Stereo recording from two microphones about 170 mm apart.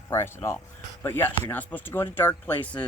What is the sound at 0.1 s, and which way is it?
Speech, 15° left (ahead or behind).